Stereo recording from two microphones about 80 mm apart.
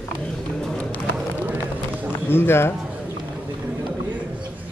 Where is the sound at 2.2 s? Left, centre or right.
Left.